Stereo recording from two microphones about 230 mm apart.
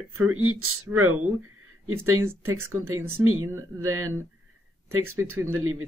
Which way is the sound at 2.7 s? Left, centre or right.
Right.